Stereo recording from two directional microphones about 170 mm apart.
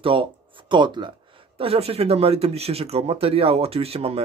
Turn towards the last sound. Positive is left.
turn(degrees=-35)  # may be behind; listen again after turning